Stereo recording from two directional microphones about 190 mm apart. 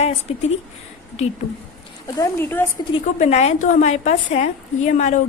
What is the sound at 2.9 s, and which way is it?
A woman's voice, 30° left (ahead or behind).